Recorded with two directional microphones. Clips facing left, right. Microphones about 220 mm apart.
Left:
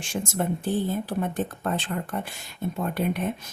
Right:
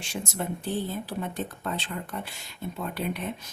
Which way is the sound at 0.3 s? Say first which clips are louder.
Left 5 dB; 50° left (ahead or behind).